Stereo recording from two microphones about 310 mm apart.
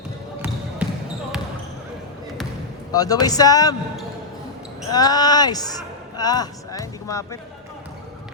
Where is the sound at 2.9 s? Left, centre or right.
Centre.